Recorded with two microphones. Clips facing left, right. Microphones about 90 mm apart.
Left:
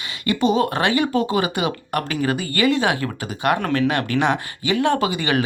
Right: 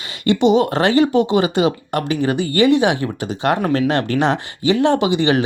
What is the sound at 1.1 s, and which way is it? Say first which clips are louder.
Speech: right 5 dB; 20° right (ahead or behind).